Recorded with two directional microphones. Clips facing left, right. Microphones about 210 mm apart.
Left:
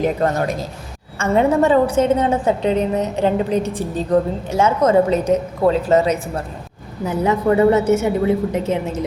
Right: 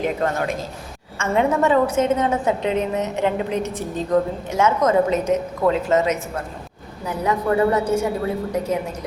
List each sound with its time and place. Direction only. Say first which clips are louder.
0.0 s a woman's voice: left 4 dB; 35° left (ahead or behind)